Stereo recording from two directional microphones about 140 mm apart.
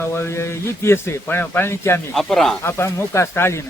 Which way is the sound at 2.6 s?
20° left (ahead or behind).